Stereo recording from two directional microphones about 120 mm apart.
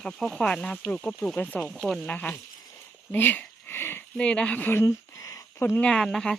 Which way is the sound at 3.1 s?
15° left (ahead or behind).